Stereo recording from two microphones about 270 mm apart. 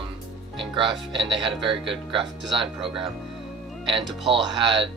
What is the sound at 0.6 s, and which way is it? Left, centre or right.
Speech, centre.